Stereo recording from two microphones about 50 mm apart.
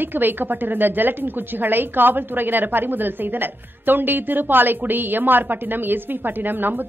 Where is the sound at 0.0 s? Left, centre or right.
Right.